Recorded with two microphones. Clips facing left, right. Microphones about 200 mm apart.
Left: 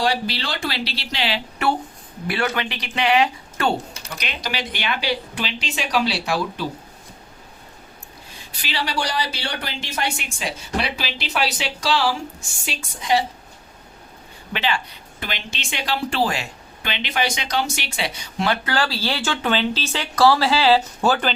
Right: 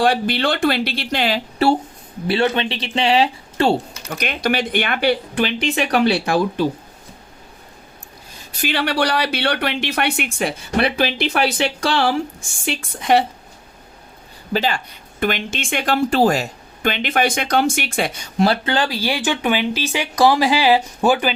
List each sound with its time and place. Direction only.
0.0 s speech: 55° right (ahead or behind)
1.6 s speech: 30° right (ahead or behind)
4.1 s speech: 50° right (ahead or behind)
8.3 s speech: 45° right (ahead or behind); by 13.2 s 60° right (ahead or behind)
14.5 s speech: 40° right (ahead or behind)
18.7 s speech: 20° right (ahead or behind)